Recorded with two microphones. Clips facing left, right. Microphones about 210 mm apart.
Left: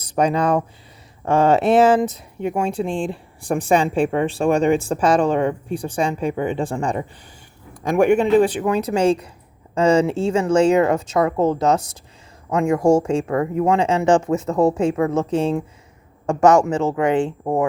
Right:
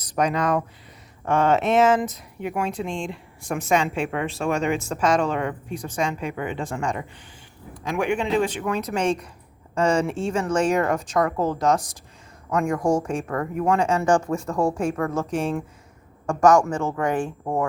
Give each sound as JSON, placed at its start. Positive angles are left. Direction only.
{"t": 0.0, "sound": "speech", "side_deg": 30}
{"t": 7.9, "sound": "speech", "side_deg": 40}